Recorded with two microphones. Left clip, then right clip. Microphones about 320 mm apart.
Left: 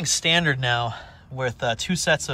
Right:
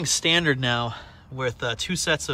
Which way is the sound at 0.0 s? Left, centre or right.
Centre.